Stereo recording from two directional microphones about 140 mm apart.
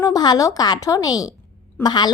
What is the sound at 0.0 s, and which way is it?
A woman's voice, 30° left (ahead or behind).